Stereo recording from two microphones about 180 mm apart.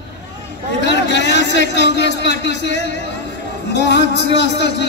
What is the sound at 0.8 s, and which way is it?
A man's voice, 75° left (ahead or behind).